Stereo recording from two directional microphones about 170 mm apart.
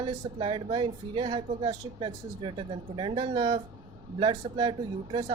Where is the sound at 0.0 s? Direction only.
30° right (ahead or behind).